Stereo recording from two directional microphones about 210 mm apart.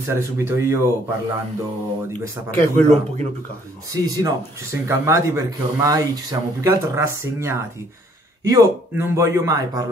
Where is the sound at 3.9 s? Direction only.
15° right (ahead or behind).